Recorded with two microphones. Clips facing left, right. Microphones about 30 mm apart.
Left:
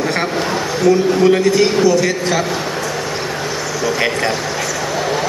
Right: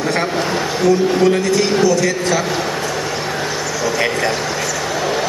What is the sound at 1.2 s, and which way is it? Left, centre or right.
A man's voice, centre.